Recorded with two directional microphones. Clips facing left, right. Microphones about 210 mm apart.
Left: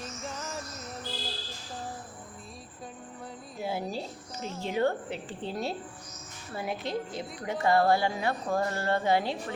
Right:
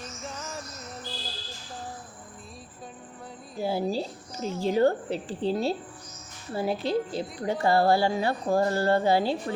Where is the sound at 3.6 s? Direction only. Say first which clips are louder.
Right 6 dB; 30° right (ahead or behind).